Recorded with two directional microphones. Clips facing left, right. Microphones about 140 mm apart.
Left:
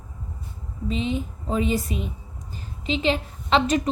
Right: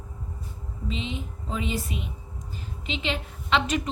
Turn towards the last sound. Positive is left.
turn(degrees=35)  # may be behind; listen again after turning